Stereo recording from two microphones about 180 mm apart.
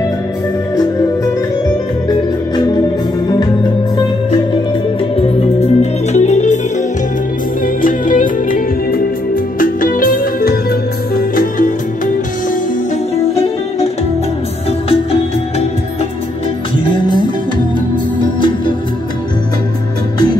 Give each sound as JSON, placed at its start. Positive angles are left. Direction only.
{"t": 2.0, "sound": "organ", "side_deg": 20}
{"t": 5.1, "sound": "music", "side_deg": 35}
{"t": 7.6, "sound": "music", "side_deg": 50}
{"t": 16.9, "sound": "music", "side_deg": 25}